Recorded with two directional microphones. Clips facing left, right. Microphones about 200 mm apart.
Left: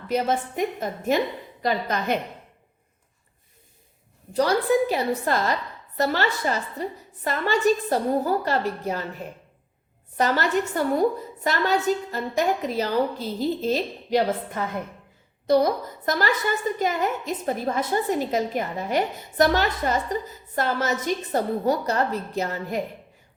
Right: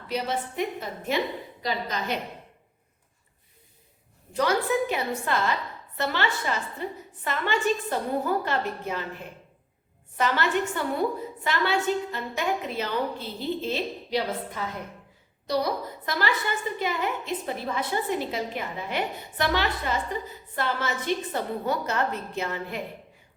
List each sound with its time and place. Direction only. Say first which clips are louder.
0.1 s a woman's voice: left 5 dB; 45° left (ahead or behind)
4.4 s a woman's voice: left 4 dB; 35° left (ahead or behind)